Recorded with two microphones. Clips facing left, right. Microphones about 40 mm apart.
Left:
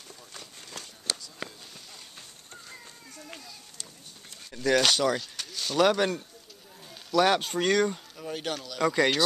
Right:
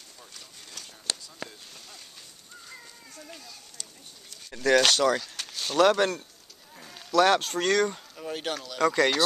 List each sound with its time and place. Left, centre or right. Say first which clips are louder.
0.8 s a sound: even; left
4.5 s speech: right 2 dB; centre
5.9 s speech: right 2 dB; centre
8.2 s speech: right 2 dB; centre
8.8 s speech: right 1 dB; centre